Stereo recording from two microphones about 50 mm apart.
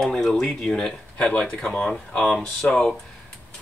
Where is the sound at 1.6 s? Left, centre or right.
Centre.